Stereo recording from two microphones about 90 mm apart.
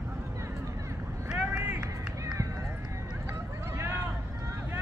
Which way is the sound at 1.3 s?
15° right (ahead or behind).